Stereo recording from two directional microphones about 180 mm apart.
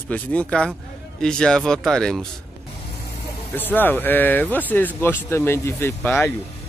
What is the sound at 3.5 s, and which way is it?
Speech, 10° left (ahead or behind).